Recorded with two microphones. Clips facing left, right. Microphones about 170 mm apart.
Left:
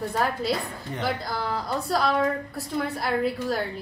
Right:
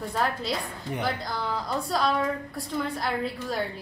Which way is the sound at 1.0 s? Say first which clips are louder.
Left 3 dB; centre (ahead or behind).